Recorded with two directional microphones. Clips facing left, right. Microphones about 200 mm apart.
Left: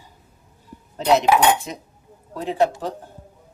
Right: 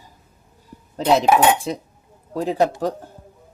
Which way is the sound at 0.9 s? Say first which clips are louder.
Right 1 dB; 35° right (ahead or behind).